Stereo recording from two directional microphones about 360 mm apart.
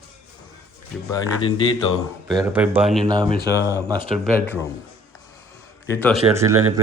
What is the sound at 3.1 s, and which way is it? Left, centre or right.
Speech, centre.